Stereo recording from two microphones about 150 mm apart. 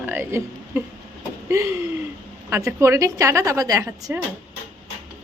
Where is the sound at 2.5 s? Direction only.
20° right (ahead or behind).